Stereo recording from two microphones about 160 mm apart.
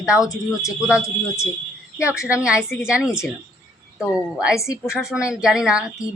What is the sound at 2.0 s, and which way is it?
Speech, 20° left (ahead or behind).